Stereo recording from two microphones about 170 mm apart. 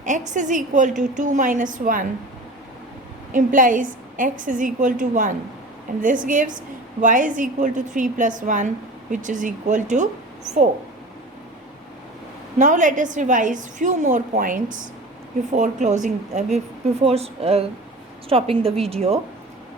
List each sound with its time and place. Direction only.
0.0 s a woman's voice: 45° right (ahead or behind)
3.3 s a woman's voice: 50° right (ahead or behind)
12.5 s a woman's voice: 45° right (ahead or behind)